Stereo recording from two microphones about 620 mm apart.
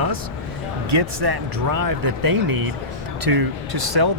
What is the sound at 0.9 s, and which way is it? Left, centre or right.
Speech, right.